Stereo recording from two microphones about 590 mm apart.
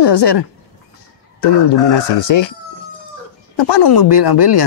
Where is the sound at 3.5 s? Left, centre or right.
Left.